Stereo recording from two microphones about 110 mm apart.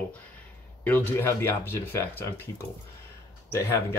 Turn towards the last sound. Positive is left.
turn(degrees=25)  # may be behind; listen again after turning